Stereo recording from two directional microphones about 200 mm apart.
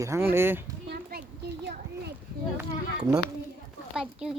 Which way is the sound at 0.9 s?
50° right (ahead or behind).